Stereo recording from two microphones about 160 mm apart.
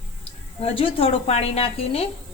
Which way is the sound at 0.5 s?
35° left (ahead or behind).